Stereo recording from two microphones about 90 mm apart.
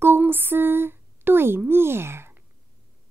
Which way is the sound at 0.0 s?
25° right (ahead or behind).